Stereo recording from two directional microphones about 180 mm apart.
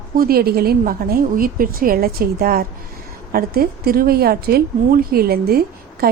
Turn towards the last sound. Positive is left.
turn(degrees=-60)  # may be behind; listen again after turning